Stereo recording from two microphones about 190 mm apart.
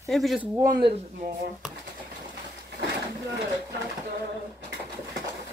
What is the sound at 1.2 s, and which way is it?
Speech, 45° right (ahead or behind).